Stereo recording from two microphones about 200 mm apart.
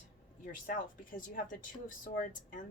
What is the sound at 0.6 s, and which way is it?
Speech, 45° left (ahead or behind).